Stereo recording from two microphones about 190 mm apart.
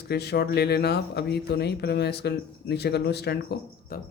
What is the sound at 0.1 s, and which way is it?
Speech, 60° left (ahead or behind).